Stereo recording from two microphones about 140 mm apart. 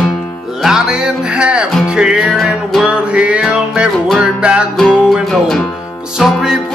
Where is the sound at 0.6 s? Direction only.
5° right (ahead or behind).